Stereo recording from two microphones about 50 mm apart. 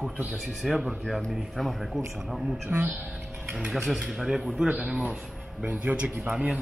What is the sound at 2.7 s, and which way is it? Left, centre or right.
Speech, right.